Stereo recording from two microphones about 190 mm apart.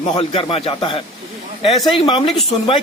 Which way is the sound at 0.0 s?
25° left (ahead or behind).